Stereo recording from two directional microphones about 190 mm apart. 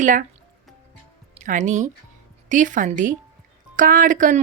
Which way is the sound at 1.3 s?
40° right (ahead or behind).